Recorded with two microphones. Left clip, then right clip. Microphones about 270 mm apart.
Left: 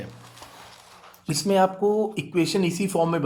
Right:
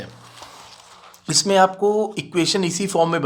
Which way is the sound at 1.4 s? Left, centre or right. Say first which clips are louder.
Right 4 dB; right.